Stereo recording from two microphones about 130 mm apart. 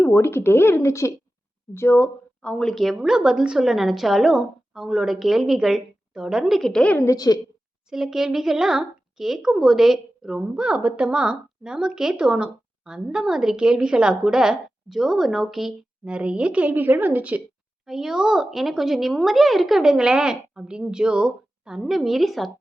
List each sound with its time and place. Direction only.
0.0 s a child's voice: 20° left (ahead or behind)
7.0 s a woman's voice: 25° left (ahead or behind)
7.9 s a child's voice: 5° right (ahead or behind)